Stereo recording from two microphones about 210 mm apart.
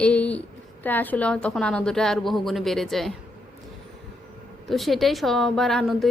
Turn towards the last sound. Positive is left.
turn(degrees=0)  # may be behind; listen again after turning